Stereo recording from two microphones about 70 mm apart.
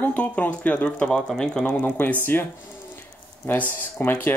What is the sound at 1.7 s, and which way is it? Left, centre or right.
Speech, left.